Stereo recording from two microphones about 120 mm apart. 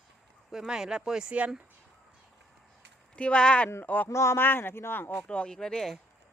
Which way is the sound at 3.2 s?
10° left (ahead or behind).